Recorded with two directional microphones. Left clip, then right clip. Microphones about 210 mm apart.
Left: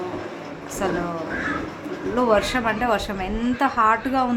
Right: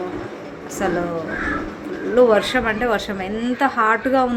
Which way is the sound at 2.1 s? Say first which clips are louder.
Right 5 dB; 5° right (ahead or behind).